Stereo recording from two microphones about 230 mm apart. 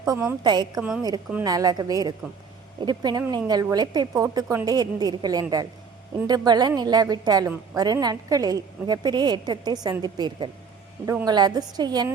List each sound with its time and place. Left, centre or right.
0.0 s a woman's voice: centre
0.8 s a woman's voice: centre